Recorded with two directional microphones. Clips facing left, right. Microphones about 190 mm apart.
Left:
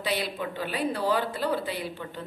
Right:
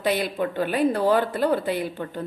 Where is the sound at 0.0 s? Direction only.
50° right (ahead or behind).